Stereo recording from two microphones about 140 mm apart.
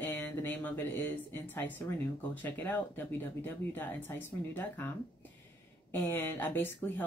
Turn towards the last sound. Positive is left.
turn(degrees=15)  # may be behind; listen again after turning